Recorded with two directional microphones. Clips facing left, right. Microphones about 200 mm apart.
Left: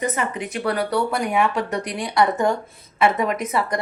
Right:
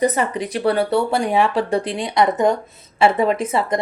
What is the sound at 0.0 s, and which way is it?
Speech, 35° right (ahead or behind).